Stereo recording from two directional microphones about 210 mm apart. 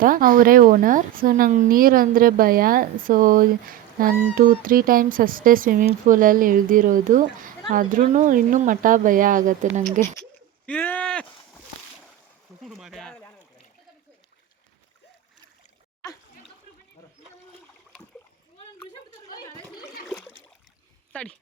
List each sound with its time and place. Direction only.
0.0 s speech: 40° right (ahead or behind)
10.7 s speech: 5° left (ahead or behind)
12.6 s a sound: centre (ahead or behind)
19.8 s splash: 5° left (ahead or behind)
21.1 s dog: 5° left (ahead or behind)